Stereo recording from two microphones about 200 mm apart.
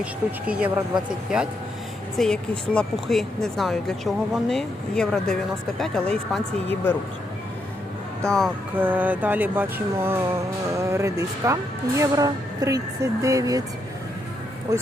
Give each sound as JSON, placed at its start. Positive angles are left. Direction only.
{"t": 0.0, "sound": "speech", "side_deg": -5}
{"t": 2.1, "sound": "speech", "side_deg": 5}
{"t": 8.2, "sound": "speech", "side_deg": 0}
{"t": 8.8, "sound": "speech", "side_deg": -10}
{"t": 14.7, "sound": "speech", "side_deg": -15}